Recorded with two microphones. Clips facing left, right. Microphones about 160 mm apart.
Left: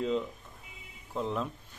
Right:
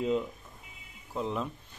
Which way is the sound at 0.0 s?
10° right (ahead or behind).